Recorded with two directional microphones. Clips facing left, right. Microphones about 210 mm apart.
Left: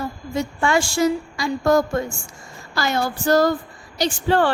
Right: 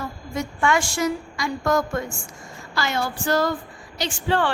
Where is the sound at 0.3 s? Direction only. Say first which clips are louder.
Left 2 dB; 30° left (ahead or behind).